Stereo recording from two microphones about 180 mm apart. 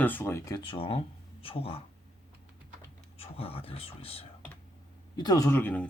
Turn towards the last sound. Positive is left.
turn(degrees=10)  # may be behind; listen again after turning